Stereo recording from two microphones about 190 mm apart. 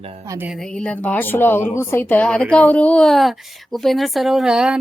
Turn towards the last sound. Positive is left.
turn(degrees=-5)  # may be behind; listen again after turning